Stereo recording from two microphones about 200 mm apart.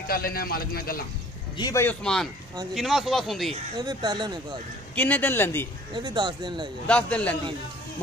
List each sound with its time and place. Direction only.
0.0 s a man's voice: 50° left (ahead or behind)
1.6 s speech: 15° left (ahead or behind)
3.7 s speech: 20° right (ahead or behind)
4.9 s speech: 10° left (ahead or behind)
5.9 s speech: 20° right (ahead or behind)
6.9 s speech: 5° left (ahead or behind)